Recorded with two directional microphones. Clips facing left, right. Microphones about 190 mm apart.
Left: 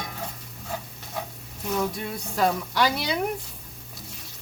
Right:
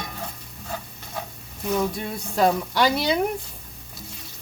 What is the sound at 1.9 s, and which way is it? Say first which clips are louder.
Speech: right 4 dB; 25° right (ahead or behind).